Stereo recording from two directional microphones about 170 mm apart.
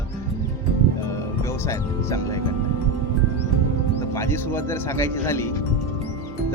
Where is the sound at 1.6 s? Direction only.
20° left (ahead or behind).